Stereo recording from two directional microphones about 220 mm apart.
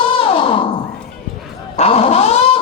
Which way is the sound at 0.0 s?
25° left (ahead or behind).